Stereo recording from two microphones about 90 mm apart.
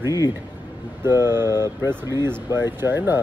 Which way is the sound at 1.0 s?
25° right (ahead or behind).